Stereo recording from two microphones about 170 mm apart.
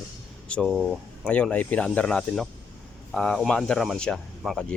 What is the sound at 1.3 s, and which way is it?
Speech, 10° left (ahead or behind).